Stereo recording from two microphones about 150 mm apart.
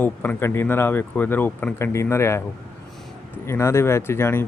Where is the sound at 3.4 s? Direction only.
20° left (ahead or behind).